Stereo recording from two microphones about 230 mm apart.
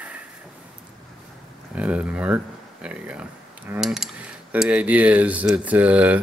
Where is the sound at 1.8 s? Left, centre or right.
Centre.